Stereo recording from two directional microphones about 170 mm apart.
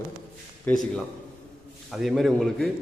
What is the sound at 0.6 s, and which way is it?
A man's voice, centre (ahead or behind).